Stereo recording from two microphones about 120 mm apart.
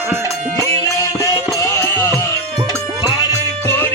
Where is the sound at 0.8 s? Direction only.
25° left (ahead or behind).